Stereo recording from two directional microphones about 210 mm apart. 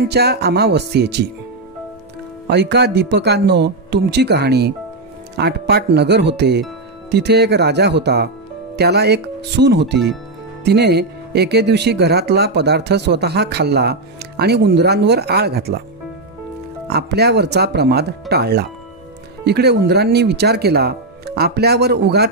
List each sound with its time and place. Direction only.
0.1 s speech: 50° right (ahead or behind)
2.5 s speech: 55° right (ahead or behind)
16.8 s speech: 50° right (ahead or behind)